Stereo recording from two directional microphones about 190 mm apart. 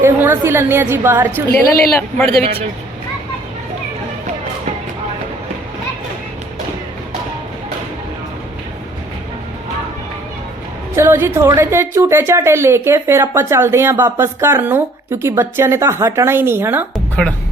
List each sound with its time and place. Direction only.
0.0 s a woman's voice: 10° right (ahead or behind)
1.3 s a woman's voice: 10° left (ahead or behind)
2.4 s a man's voice: 30° right (ahead or behind)
10.9 s a woman's voice: 15° right (ahead or behind)